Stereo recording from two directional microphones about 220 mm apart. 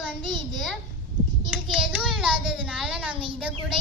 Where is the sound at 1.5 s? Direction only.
Centre (ahead or behind).